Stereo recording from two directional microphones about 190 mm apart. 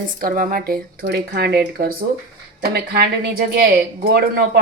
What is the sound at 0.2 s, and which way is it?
Speech, 50° right (ahead or behind).